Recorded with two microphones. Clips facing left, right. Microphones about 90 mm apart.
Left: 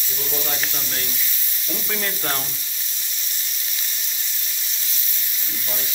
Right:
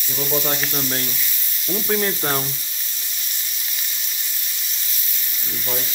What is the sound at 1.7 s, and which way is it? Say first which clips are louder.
Frying: right 7 dB; 20° right (ahead or behind).